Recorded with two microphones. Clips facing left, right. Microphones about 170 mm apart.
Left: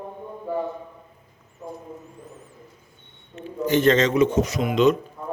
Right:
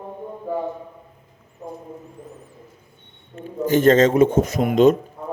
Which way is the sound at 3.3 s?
45° right (ahead or behind).